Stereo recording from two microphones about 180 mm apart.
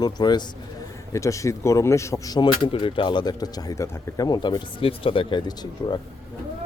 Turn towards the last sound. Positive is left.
turn(degrees=25)  # may be behind; listen again after turning